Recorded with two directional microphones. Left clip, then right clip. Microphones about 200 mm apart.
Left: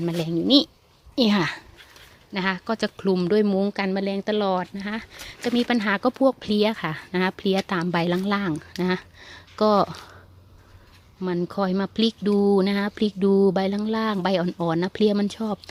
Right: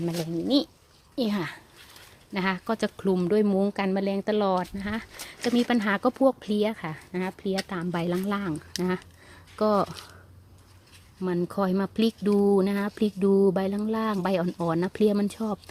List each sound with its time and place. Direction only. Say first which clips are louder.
0.0 s speech: left 5 dB; 20° left (ahead or behind)
2.3 s speech: left 2 dB; 5° left (ahead or behind)
11.2 s speech: left 2 dB; 5° left (ahead or behind)